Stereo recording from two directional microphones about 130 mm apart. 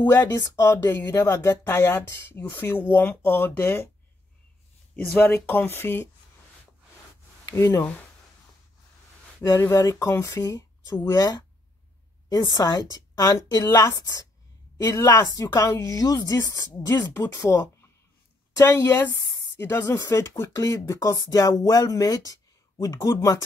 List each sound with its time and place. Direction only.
0.0 s speech: 15° left (ahead or behind)
4.9 s speech: 15° left (ahead or behind)
7.5 s speech: 25° left (ahead or behind)
9.4 s a woman's voice: 25° left (ahead or behind)